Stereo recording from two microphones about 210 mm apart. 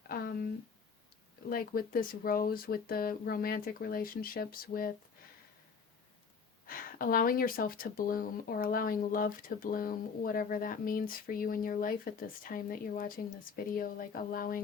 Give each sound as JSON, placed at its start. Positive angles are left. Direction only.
{"t": 0.1, "sound": "a sound", "side_deg": 45}
{"t": 1.5, "sound": "speech", "side_deg": 45}
{"t": 6.7, "sound": "speech", "side_deg": 40}